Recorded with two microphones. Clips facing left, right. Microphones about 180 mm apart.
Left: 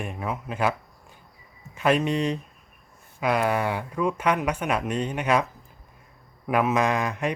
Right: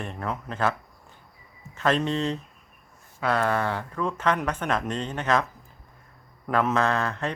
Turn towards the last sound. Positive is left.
turn(degrees=15)  # may be behind; listen again after turning